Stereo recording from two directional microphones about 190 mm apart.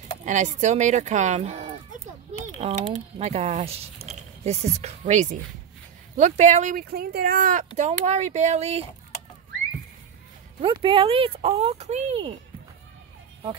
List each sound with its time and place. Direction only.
0.2 s speech: 40° right (ahead or behind)
10.6 s speech: 25° right (ahead or behind)